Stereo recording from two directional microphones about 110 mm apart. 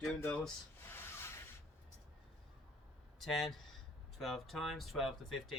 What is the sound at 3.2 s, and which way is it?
Speech, centre (ahead or behind).